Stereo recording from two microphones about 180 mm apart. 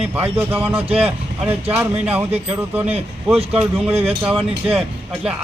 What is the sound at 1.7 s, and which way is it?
Speech, 10° right (ahead or behind).